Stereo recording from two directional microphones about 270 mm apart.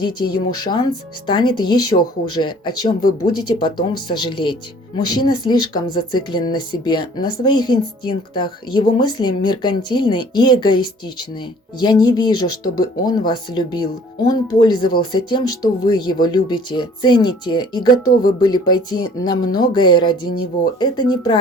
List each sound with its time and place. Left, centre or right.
0.0 s speech: centre
11.8 s speech: centre